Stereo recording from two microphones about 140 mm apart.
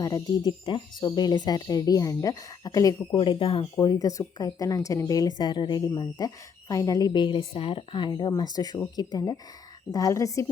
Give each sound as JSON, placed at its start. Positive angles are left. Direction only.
{"t": 0.0, "sound": "speech", "side_deg": 25}
{"t": 3.2, "sound": "speech", "side_deg": 40}
{"t": 3.6, "sound": "speech", "side_deg": 30}